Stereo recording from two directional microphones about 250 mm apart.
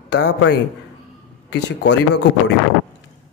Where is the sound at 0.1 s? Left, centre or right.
Left.